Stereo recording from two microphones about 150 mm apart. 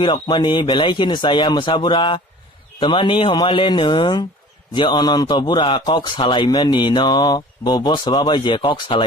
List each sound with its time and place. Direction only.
0.0 s speech: 35° left (ahead or behind)